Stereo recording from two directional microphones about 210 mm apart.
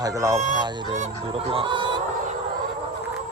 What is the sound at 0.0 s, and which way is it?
Speech, 15° right (ahead or behind).